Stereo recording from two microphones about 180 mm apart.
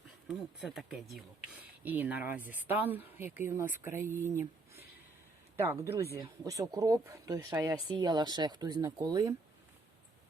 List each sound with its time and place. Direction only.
0.3 s speech: centre (ahead or behind)
5.5 s speech: 15° right (ahead or behind)